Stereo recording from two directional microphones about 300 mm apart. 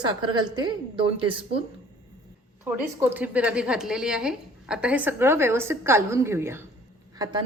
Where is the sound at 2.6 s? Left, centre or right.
Centre.